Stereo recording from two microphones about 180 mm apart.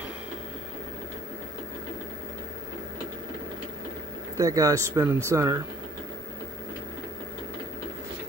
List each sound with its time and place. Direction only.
4.4 s speech: 20° right (ahead or behind)